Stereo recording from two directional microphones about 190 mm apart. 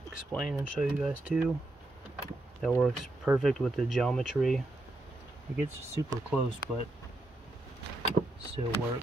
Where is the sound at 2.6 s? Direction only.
5° right (ahead or behind).